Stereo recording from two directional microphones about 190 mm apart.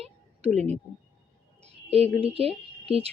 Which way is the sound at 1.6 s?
30° right (ahead or behind).